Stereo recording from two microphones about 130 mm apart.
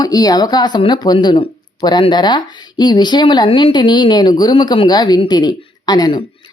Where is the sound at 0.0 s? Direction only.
30° left (ahead or behind).